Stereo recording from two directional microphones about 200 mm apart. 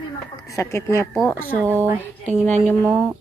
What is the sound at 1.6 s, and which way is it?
Speech, 10° right (ahead or behind).